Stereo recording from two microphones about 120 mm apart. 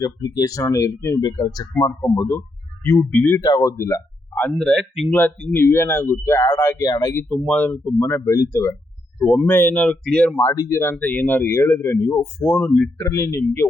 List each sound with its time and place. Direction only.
0.0 s speech: 30° left (ahead or behind)
4.6 s speech: centre (ahead or behind)
5.1 s speech: 15° left (ahead or behind); by 7.2 s 30° left (ahead or behind)
7.3 s speech: 10° left (ahead or behind)
7.9 s speech: 20° left (ahead or behind)
10.3 s speech: 30° left (ahead or behind); by 12.9 s 10° left (ahead or behind)
13.0 s speech: 25° left (ahead or behind)